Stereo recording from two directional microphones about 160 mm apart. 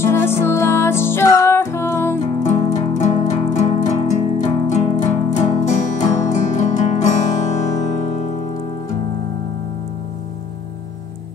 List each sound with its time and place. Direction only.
0.0 s music: 15° left (ahead or behind)
2.4 s music: 45° left (ahead or behind)